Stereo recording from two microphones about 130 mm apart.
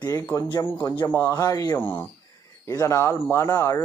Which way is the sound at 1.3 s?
25° left (ahead or behind).